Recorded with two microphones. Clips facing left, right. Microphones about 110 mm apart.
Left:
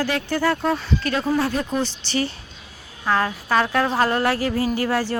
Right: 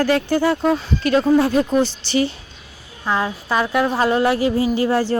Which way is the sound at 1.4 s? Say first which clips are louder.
Right 6 dB; 30° right (ahead or behind).